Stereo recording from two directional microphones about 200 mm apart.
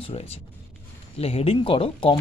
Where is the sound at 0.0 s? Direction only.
30° left (ahead or behind).